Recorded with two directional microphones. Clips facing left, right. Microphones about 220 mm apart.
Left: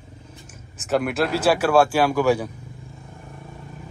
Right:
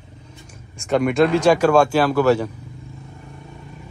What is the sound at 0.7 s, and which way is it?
Speech, 5° left (ahead or behind).